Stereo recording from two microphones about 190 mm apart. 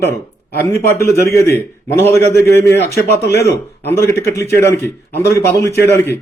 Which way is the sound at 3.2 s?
60° left (ahead or behind).